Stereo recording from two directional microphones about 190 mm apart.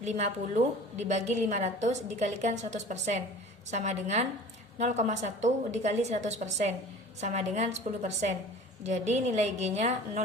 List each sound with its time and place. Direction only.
0.0 s a woman's voice: 35° right (ahead or behind)